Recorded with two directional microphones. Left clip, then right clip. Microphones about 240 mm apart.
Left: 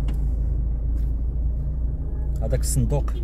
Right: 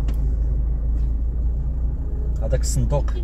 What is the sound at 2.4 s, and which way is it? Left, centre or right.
Speech, left.